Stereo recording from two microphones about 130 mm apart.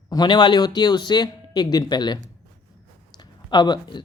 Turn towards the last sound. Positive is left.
turn(degrees=35)  # may be behind; listen again after turning